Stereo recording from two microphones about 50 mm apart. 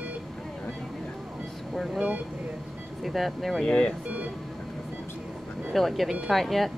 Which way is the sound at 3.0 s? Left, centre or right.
Centre.